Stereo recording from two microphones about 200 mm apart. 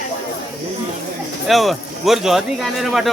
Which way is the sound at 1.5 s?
Centre (ahead or behind).